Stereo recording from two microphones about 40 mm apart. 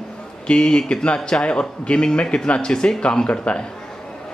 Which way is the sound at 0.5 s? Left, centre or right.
Centre.